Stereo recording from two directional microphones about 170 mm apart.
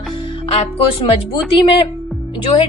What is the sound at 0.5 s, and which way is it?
A woman's voice, 35° left (ahead or behind).